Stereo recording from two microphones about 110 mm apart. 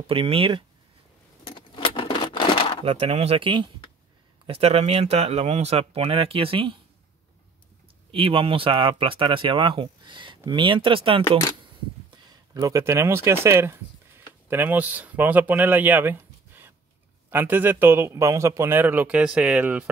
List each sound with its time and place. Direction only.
0.0 s speech: 55° right (ahead or behind)
1.5 s keys jangling: 50° left (ahead or behind)
2.8 s speech: 70° right (ahead or behind); by 3.7 s 45° right (ahead or behind)
4.5 s speech: 65° right (ahead or behind)
8.1 s speech: 55° right (ahead or behind)
12.1 s a man's voice: 35° right (ahead or behind); by 19.9 s 15° right (ahead or behind)